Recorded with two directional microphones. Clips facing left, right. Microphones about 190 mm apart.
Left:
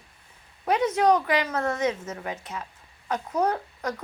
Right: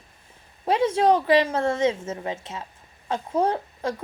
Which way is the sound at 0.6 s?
30° right (ahead or behind).